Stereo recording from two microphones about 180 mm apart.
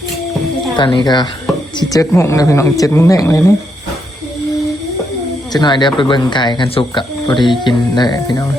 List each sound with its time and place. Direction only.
0.8 s speech: 25° left (ahead or behind)
5.5 s speech: 25° left (ahead or behind)